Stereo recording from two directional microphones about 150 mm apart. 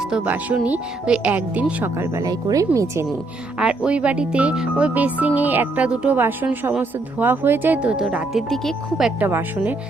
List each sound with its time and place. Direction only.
0.1 s speech: 10° right (ahead or behind)
3.6 s speech: 5° right (ahead or behind)
9.2 s speech: 15° right (ahead or behind)